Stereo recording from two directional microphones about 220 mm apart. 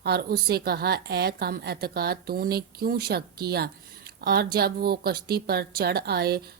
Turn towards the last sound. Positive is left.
turn(degrees=-45)  # may be behind; listen again after turning